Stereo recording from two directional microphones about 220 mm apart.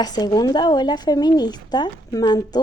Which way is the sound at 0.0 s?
20° left (ahead or behind).